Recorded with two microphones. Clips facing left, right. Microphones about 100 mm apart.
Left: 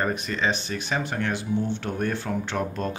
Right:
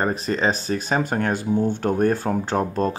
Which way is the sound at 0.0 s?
35° right (ahead or behind).